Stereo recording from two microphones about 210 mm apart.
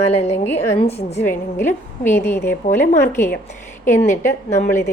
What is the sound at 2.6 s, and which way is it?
Speech, 30° left (ahead or behind).